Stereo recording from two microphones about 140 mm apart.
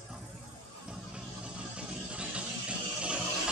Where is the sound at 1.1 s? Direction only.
5° right (ahead or behind).